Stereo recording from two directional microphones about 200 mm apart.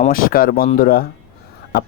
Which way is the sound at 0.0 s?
45° left (ahead or behind).